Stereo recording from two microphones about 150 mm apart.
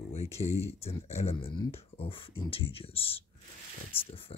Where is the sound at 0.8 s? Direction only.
45° left (ahead or behind).